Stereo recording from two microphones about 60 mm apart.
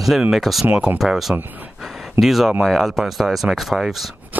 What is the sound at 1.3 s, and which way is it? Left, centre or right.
Speech, right.